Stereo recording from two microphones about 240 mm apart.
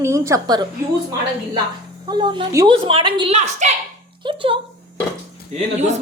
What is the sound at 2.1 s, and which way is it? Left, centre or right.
A woman's voice, centre.